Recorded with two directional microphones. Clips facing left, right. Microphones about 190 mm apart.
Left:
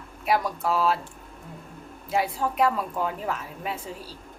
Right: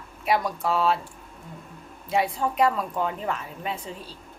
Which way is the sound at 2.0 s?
Centre (ahead or behind).